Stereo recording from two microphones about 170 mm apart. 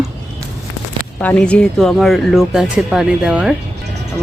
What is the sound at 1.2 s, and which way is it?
Speech, 10° left (ahead or behind).